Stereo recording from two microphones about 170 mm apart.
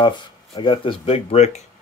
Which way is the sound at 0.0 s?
25° left (ahead or behind).